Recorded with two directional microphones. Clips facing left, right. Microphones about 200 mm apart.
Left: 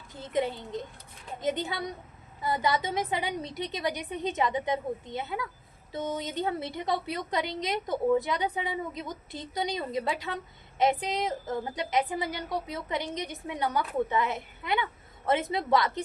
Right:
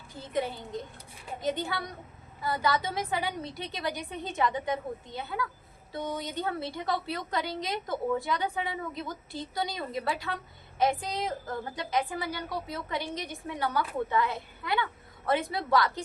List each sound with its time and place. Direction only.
0.2 s a woman's voice: 20° left (ahead or behind)